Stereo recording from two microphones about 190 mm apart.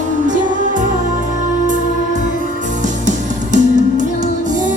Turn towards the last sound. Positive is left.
turn(degrees=-40)  # may be behind; listen again after turning